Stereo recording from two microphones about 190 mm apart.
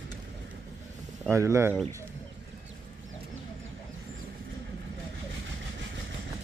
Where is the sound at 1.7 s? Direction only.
5° left (ahead or behind).